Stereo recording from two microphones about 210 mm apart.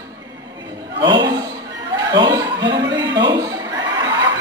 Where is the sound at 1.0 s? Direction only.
20° right (ahead or behind).